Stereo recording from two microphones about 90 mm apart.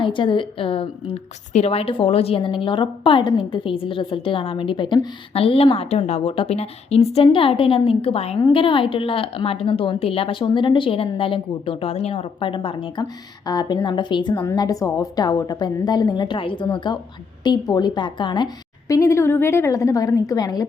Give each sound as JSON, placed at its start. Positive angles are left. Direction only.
{"t": 0.0, "sound": "a woman's voice", "side_deg": 65}
{"t": 8.5, "sound": "a woman's voice", "side_deg": 75}
{"t": 13.0, "sound": "a woman's voice", "side_deg": 50}
{"t": 14.4, "sound": "a woman's voice", "side_deg": 45}
{"t": 16.6, "sound": "a woman's voice", "side_deg": 55}
{"t": 18.9, "sound": "a woman's voice", "side_deg": 35}